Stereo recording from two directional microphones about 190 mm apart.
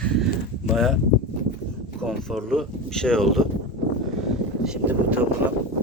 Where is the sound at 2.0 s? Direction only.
Centre (ahead or behind).